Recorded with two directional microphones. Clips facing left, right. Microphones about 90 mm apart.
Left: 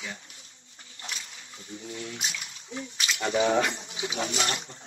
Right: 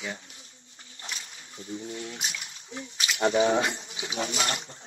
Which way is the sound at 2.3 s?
35° right (ahead or behind).